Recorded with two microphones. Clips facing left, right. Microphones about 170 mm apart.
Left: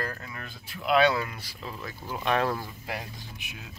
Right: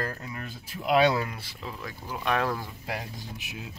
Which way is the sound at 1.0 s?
15° right (ahead or behind).